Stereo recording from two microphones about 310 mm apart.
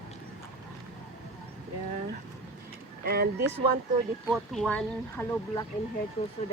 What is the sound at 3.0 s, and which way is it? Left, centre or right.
Speech, right.